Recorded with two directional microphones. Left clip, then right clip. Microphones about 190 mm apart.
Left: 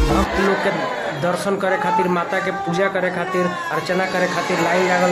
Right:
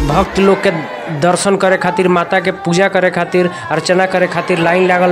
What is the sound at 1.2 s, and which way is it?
Speech, 50° right (ahead or behind).